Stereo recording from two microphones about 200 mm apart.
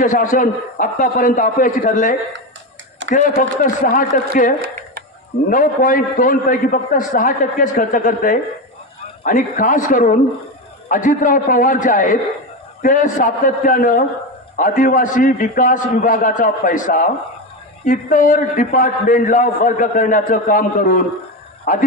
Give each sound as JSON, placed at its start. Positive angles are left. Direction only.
{"t": 0.0, "sound": "a man's voice", "side_deg": 40}